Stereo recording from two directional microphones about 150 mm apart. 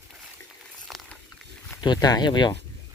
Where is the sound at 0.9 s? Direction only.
Centre (ahead or behind).